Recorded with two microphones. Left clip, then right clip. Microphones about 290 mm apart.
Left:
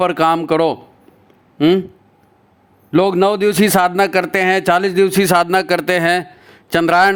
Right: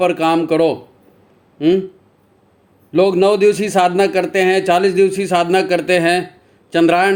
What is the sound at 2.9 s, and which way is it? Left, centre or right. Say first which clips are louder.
A man's voice: right 1 dB; left.